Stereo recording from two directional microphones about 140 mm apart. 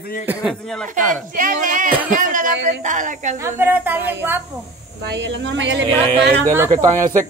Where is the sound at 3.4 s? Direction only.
15° right (ahead or behind).